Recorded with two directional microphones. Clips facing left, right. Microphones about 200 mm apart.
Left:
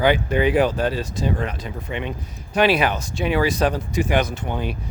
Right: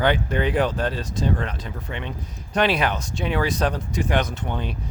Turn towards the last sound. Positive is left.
turn(degrees=10)  # may be behind; listen again after turning